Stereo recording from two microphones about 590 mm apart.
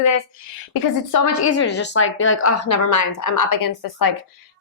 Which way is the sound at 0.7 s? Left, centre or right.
Left.